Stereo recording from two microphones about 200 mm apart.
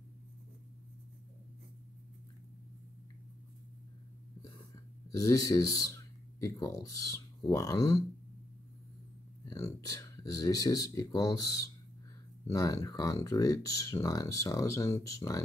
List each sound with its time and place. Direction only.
5.1 s speech: 20° left (ahead or behind)
9.5 s speech: 15° left (ahead or behind)